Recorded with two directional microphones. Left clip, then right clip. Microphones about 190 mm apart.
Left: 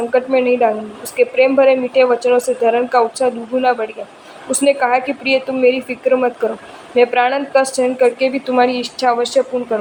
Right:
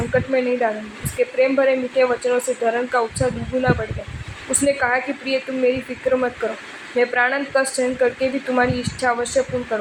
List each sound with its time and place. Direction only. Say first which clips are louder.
0.1 s a woman's voice: left 5 dB; 20° left (ahead or behind)